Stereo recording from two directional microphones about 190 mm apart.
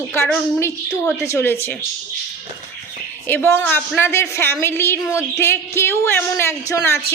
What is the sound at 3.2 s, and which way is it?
A woman's voice, 10° left (ahead or behind).